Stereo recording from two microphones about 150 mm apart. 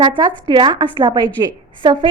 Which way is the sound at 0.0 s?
30° right (ahead or behind).